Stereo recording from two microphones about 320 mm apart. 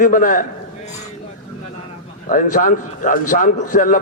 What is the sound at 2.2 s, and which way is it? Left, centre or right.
A man's voice, left.